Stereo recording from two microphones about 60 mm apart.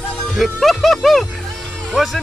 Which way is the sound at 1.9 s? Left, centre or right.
Centre.